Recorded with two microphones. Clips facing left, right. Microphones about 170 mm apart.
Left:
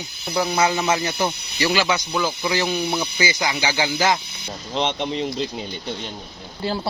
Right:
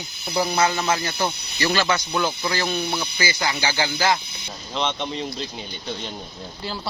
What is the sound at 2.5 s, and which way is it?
Speech, 15° left (ahead or behind).